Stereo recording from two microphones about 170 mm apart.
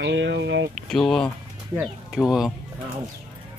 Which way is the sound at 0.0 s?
85° right.